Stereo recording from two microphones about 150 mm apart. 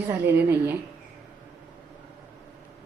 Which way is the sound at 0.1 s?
15° right (ahead or behind).